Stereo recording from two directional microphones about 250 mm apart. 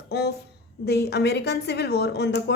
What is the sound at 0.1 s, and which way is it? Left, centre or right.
A woman's voice, left.